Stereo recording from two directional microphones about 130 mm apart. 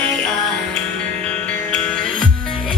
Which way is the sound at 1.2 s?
10° left (ahead or behind).